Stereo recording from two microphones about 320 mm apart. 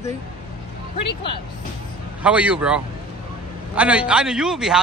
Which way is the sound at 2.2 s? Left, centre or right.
Centre.